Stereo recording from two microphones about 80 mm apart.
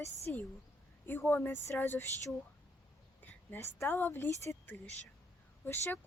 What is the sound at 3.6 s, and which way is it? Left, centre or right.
Speech, left.